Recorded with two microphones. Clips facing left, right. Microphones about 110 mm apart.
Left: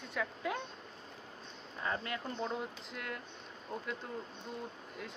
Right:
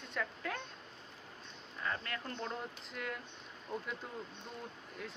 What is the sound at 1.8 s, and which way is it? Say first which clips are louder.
Speech: left 2 dB; 20° left (ahead or behind).